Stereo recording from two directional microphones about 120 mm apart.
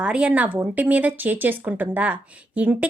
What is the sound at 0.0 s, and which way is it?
A woman's voice, 10° right (ahead or behind).